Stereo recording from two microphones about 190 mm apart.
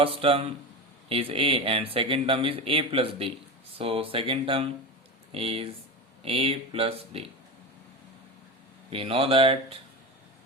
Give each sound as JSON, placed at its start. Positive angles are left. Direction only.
{"t": 0.0, "sound": "speech", "side_deg": -30}
{"t": 8.9, "sound": "speech", "side_deg": -30}